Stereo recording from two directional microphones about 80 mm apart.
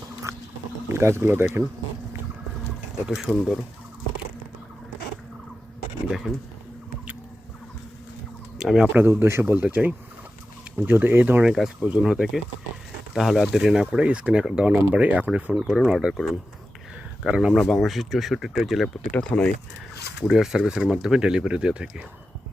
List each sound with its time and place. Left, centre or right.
0.3 s pig: right
0.9 s speech: right
3.1 s speech: centre
8.5 s speech: centre
8.9 s speech: right
11.4 s speech: centre
11.8 s speech: centre
15.6 s speech: centre
17.2 s speech: centre
17.5 s speech: centre
19.1 s speech: centre
20.2 s speech: centre